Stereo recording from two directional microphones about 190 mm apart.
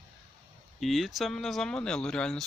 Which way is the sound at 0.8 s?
Centre (ahead or behind).